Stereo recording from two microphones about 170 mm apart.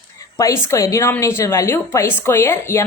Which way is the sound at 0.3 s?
20° left (ahead or behind).